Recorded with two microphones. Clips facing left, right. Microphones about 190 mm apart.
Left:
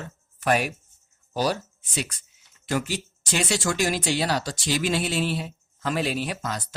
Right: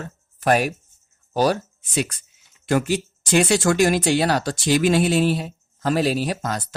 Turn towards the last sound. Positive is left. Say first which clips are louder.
# right 5 dB
turn(degrees=-45)  # may be behind; listen again after turning